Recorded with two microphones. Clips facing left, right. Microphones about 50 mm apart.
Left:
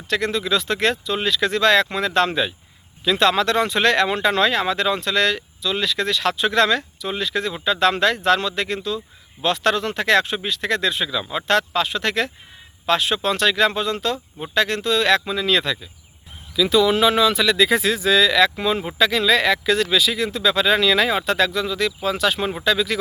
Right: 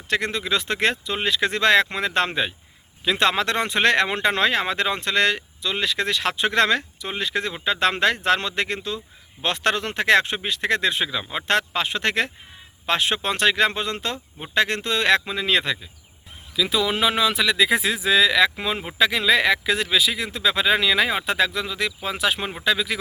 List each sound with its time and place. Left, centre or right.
0.1 s speech: right
16.6 s speech: centre